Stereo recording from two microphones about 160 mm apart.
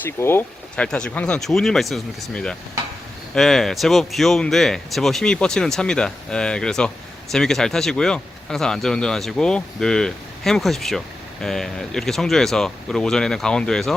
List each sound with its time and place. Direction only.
0.2 s speech: 15° left (ahead or behind)